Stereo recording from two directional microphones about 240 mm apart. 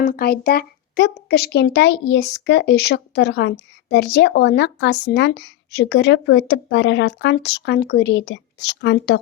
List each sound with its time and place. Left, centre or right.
0.0 s speech: left